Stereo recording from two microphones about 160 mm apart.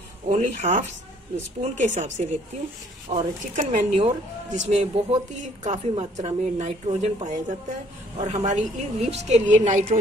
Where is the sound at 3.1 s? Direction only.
40° right (ahead or behind).